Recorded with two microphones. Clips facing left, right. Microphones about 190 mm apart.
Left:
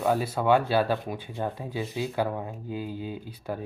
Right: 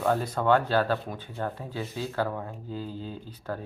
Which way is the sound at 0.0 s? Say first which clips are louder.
Left 1 dB; 10° left (ahead or behind).